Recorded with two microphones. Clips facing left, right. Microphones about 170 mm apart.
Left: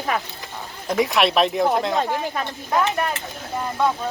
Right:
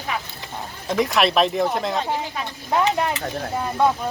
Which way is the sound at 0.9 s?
Centre (ahead or behind).